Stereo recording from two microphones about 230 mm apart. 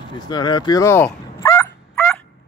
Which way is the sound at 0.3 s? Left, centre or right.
Centre.